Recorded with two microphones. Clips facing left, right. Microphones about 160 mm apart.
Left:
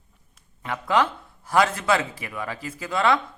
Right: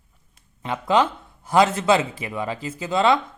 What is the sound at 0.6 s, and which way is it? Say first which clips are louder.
Speech: right 3 dB; 20° right (ahead or behind).